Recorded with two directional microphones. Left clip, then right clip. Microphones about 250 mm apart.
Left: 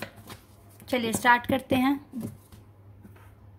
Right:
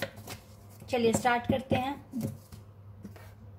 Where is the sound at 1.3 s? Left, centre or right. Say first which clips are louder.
Left 5 dB; left.